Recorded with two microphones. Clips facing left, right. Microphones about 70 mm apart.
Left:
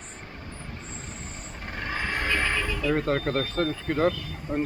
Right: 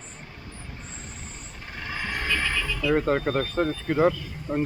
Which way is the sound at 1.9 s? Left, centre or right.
Centre.